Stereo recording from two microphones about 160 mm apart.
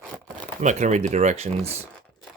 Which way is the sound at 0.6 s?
50° right (ahead or behind).